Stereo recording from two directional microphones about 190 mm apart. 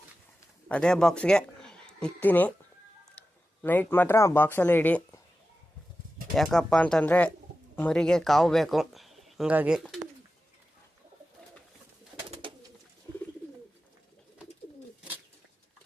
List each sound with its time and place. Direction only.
0.7 s speech: 5° left (ahead or behind)
6.3 s speech: centre (ahead or behind)
12.3 s bird: 25° right (ahead or behind)